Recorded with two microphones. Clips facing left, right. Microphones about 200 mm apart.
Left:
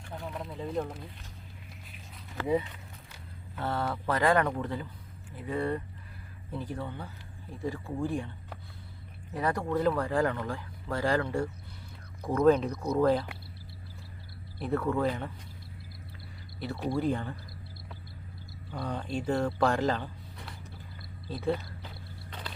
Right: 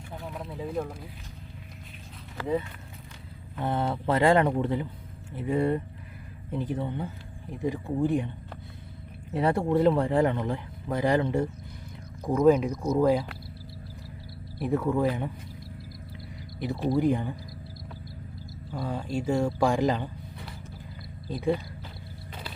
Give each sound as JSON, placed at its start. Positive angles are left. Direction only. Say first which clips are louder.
{"t": 0.1, "sound": "a sound", "louder": "even", "side_deg": 0}
{"t": 3.6, "sound": "speech", "louder": "right 4 dB", "side_deg": -20}
{"t": 9.3, "sound": "speech", "louder": "right 6 dB", "side_deg": -25}
{"t": 14.6, "sound": "speech", "louder": "right 3 dB", "side_deg": -15}
{"t": 16.6, "sound": "speech", "louder": "right 5 dB", "side_deg": -20}
{"t": 18.7, "sound": "speech", "louder": "right 3 dB", "side_deg": -5}
{"t": 21.2, "sound": "speech", "louder": "right 4 dB", "side_deg": -15}
{"t": 22.3, "sound": "creak", "louder": "right 2 dB", "side_deg": -5}